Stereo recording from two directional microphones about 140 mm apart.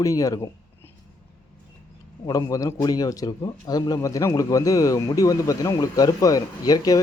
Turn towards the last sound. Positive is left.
turn(degrees=25)  # may be behind; listen again after turning